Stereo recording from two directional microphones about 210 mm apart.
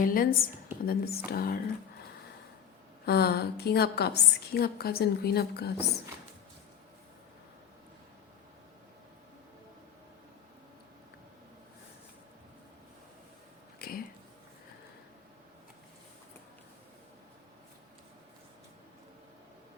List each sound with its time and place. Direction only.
0.0 s a woman's voice: 45° left (ahead or behind)
3.1 s a woman's voice: 50° left (ahead or behind)
13.7 s a sound: 45° left (ahead or behind)